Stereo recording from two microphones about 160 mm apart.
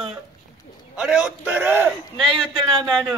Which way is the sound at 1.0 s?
5° right (ahead or behind).